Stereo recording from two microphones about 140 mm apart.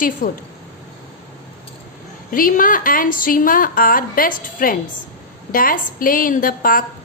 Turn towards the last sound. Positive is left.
turn(degrees=90)